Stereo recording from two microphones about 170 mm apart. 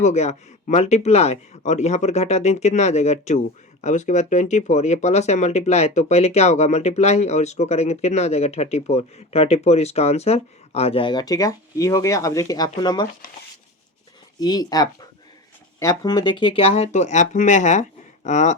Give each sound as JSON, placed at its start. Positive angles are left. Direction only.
{"t": 0.0, "sound": "speech", "side_deg": 40}
{"t": 14.3, "sound": "speech", "side_deg": 25}